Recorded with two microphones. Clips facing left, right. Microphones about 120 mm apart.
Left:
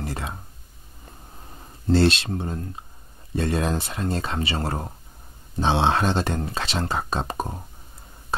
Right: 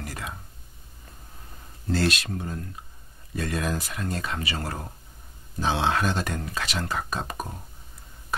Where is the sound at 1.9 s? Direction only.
30° left (ahead or behind).